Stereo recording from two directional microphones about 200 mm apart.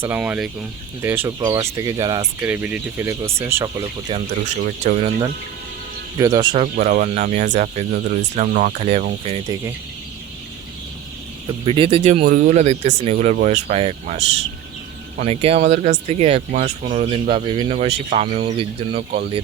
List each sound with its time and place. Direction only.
0.0 s speech: 10° right (ahead or behind)
2.4 s speech: 10° right (ahead or behind)
4.1 s speech: 35° right (ahead or behind)
6.1 s speech: 20° right (ahead or behind)
6.7 s speech: 40° right (ahead or behind)
11.6 s speech: 25° right (ahead or behind)
12.2 s speech: 40° right (ahead or behind)